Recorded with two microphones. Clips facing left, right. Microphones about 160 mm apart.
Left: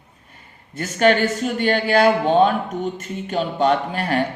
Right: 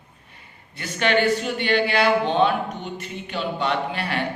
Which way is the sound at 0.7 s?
45° left (ahead or behind).